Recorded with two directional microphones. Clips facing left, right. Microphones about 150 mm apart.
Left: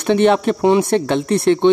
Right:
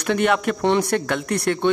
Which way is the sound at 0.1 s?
25° left (ahead or behind).